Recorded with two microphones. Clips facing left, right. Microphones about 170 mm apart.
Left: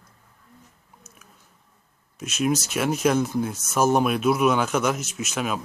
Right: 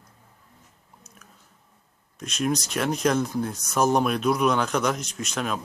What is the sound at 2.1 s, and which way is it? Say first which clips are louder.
Speech: left 2 dB; 5° left (ahead or behind).